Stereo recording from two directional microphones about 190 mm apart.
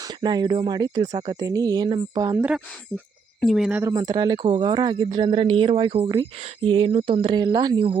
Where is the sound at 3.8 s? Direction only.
20° right (ahead or behind).